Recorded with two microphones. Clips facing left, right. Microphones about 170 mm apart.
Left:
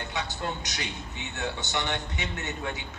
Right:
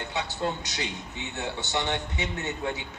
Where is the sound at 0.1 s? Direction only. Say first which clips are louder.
Right 4 dB; 25° right (ahead or behind).